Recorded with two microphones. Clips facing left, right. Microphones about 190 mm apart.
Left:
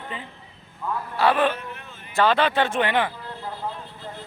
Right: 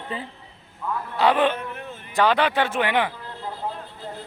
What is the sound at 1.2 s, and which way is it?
A man's voice, 20° right (ahead or behind).